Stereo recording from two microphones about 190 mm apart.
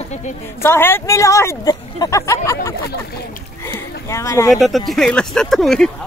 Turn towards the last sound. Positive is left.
turn(degrees=0)  # may be behind; listen again after turning